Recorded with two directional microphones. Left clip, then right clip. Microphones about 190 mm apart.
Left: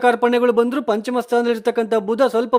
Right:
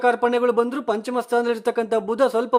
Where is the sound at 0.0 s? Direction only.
25° left (ahead or behind).